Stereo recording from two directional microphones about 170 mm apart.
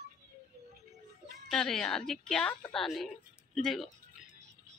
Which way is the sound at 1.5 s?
5° left (ahead or behind).